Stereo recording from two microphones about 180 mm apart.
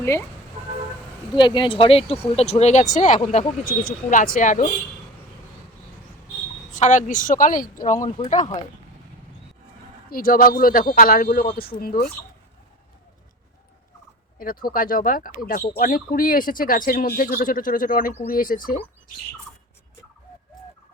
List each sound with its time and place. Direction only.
0.0 s speech: 15° left (ahead or behind)
1.4 s speech: 25° left (ahead or behind); by 3.2 s 40° left (ahead or behind)
3.6 s speech: 5° left (ahead or behind)
4.1 s speech: 45° left (ahead or behind)
6.7 s speech: 45° left (ahead or behind)
10.1 s speech: 55° left (ahead or behind)
14.3 s speech: 55° left (ahead or behind)